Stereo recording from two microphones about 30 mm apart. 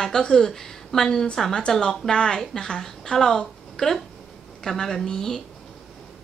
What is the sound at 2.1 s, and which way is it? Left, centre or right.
Speech, left.